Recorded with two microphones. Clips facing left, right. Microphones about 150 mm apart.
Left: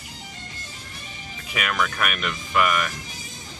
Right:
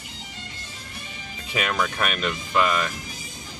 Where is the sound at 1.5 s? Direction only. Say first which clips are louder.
Right 1 dB; 25° right (ahead or behind).